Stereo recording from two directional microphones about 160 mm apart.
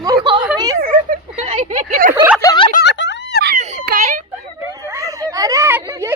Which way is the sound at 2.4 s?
25° left (ahead or behind).